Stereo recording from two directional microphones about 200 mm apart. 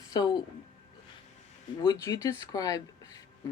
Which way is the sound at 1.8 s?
20° left (ahead or behind).